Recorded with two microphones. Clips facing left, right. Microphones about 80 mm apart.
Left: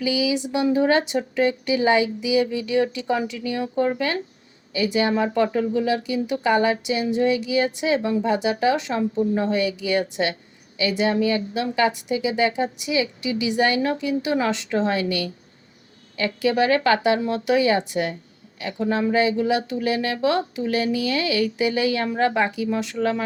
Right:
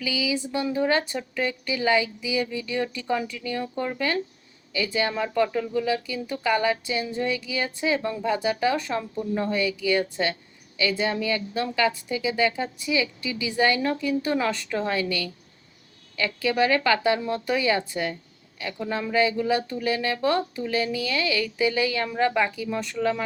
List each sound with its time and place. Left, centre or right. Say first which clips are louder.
0.0 s speech: left 5 dB; left